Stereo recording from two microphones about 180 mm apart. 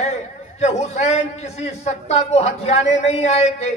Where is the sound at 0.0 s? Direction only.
40° left (ahead or behind).